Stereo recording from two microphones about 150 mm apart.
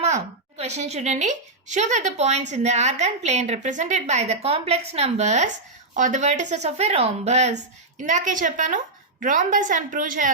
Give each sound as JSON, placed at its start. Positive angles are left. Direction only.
{"t": 0.0, "sound": "a woman's voice", "side_deg": -45}